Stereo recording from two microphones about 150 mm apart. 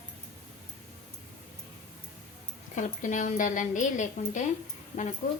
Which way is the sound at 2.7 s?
55° left (ahead or behind).